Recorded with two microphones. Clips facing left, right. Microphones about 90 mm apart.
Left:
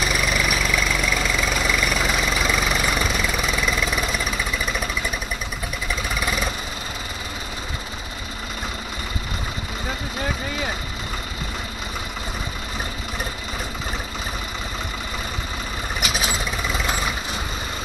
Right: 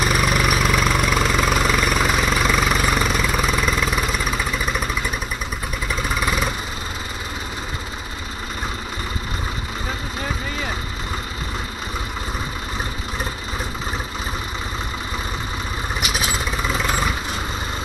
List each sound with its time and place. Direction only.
0.0 s engine: 50° right (ahead or behind)
0.6 s vehicle: 55° right (ahead or behind)